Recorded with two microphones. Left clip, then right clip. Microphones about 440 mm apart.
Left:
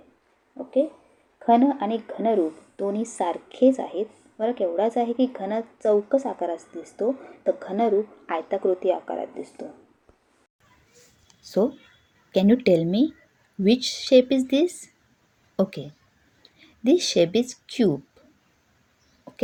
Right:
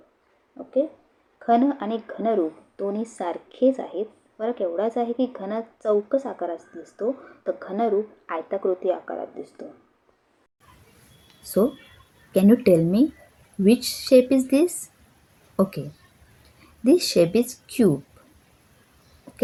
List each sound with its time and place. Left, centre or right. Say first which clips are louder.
0.5 s a sound: left 1 dB; centre
1.4 s speech: left 1 dB; centre
12.3 s speech: right 2 dB; right
16.8 s speech: right 1 dB; right